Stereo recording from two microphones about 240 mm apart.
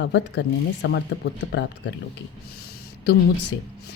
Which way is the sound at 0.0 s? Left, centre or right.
Left.